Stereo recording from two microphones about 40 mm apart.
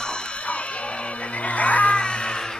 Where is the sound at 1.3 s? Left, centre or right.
Left.